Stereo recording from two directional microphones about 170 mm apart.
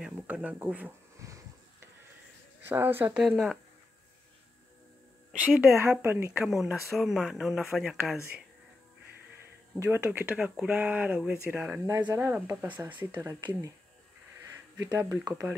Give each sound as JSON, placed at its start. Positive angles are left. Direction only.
{"t": 0.0, "sound": "speech", "side_deg": -10}
{"t": 2.7, "sound": "speech", "side_deg": -10}
{"t": 5.6, "sound": "speech", "side_deg": -15}
{"t": 6.4, "sound": "speech", "side_deg": 0}
{"t": 9.8, "sound": "speech", "side_deg": -10}
{"t": 11.8, "sound": "speech", "side_deg": -20}
{"t": 13.1, "sound": "speech", "side_deg": -25}
{"t": 14.8, "sound": "speech", "side_deg": -20}